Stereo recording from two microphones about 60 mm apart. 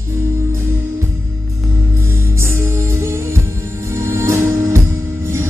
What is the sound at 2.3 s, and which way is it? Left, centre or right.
Music, right.